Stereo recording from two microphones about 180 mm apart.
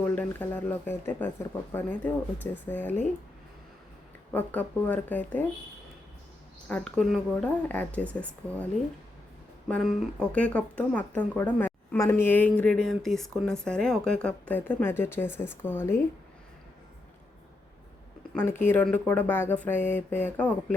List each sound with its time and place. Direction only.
0.0 s speech: 10° left (ahead or behind)
4.3 s speech: 10° left (ahead or behind)
6.7 s speech: 5° left (ahead or behind)
9.6 s speech: 5° left (ahead or behind)
18.3 s speech: 10° left (ahead or behind)